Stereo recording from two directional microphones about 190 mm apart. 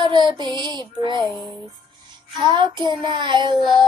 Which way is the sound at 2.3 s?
25° right (ahead or behind).